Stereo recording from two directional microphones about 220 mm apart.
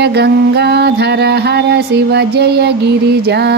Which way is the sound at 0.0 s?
50° right (ahead or behind).